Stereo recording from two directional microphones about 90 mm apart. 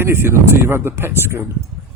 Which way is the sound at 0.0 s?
25° right (ahead or behind).